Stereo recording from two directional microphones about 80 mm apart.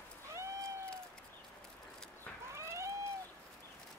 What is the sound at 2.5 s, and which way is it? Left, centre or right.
Cat, right.